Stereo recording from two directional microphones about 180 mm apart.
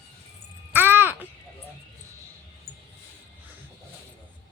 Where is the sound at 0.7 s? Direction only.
10° right (ahead or behind).